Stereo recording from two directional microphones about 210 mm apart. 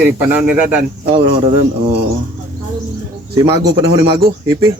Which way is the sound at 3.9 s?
20° right (ahead or behind).